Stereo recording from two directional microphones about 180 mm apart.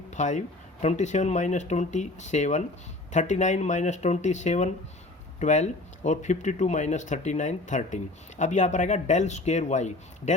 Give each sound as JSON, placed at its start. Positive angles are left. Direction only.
{"t": 0.1, "sound": "speech", "side_deg": 40}